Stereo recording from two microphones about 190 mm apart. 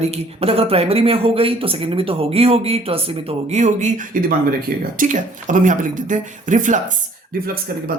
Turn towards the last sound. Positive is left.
turn(degrees=-50)  # may be behind; listen again after turning